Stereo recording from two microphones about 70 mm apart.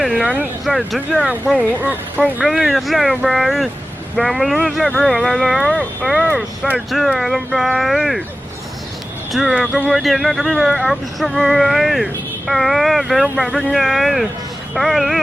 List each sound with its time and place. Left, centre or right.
0.6 s speech: centre
1.5 s speech: right
2.4 s speech: centre
9.3 s speech: centre